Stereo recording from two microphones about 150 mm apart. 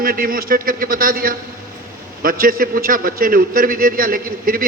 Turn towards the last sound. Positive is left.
turn(degrees=-70)  # may be behind; listen again after turning